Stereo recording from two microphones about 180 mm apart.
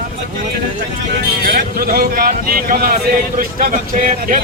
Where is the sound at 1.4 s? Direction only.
55° right (ahead or behind).